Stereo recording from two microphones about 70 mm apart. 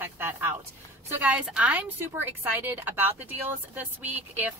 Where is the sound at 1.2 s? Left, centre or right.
Centre.